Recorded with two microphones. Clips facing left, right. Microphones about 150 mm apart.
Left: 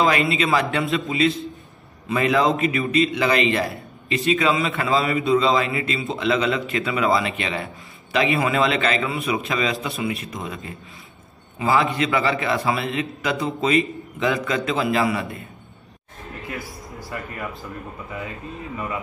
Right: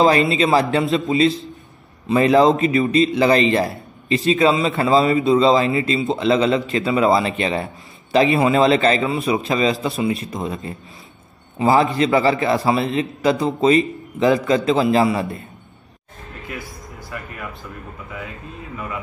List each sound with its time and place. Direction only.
0.0 s a man's voice: 35° right (ahead or behind)
9.0 s a man's voice: 25° right (ahead or behind)